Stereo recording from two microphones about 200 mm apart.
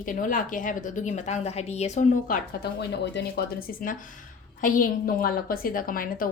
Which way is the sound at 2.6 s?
55° left (ahead or behind).